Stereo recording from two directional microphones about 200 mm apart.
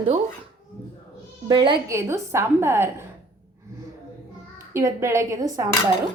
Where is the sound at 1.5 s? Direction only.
25° right (ahead or behind).